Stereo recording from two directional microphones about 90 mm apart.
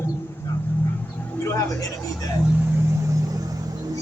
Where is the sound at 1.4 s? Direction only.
35° left (ahead or behind).